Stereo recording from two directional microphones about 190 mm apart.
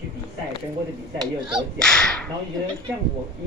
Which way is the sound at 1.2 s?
25° right (ahead or behind).